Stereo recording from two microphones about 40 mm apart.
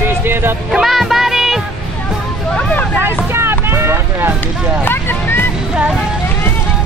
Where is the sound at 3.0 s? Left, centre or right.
Right.